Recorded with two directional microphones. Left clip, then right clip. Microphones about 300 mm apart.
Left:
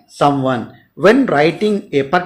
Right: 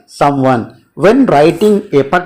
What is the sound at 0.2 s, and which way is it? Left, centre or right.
Speech, centre.